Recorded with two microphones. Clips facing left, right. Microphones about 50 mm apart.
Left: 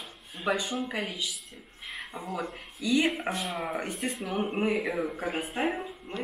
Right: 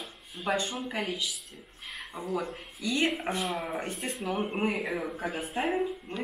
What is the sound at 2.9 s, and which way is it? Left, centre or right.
Speech, centre.